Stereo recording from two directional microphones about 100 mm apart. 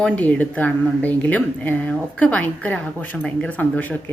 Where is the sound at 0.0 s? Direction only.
15° left (ahead or behind).